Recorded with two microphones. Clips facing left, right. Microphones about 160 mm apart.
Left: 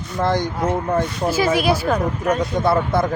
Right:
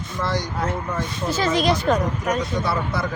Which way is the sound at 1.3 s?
10° left (ahead or behind).